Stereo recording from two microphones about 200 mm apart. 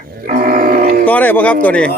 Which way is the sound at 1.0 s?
10° left (ahead or behind).